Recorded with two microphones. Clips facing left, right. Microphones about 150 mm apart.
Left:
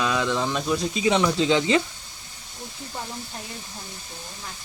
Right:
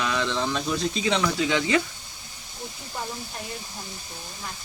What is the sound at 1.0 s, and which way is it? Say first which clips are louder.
Speech: left 5 dB; 20° left (ahead or behind).